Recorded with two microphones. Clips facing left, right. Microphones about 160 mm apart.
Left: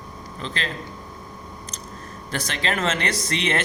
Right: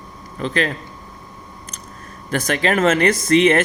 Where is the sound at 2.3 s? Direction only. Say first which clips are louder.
Right 8 dB; 50° right (ahead or behind).